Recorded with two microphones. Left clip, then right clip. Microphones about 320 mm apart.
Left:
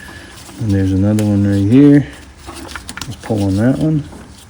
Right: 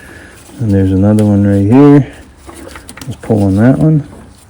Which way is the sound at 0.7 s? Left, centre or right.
Centre.